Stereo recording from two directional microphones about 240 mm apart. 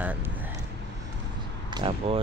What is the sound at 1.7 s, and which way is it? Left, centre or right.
Speech, centre.